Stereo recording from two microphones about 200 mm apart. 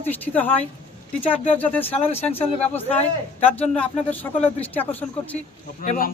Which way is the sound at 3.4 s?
10° left (ahead or behind).